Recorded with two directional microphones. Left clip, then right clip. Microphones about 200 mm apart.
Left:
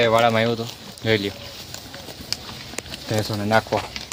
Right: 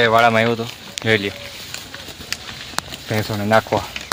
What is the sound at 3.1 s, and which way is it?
Speech, 35° right (ahead or behind).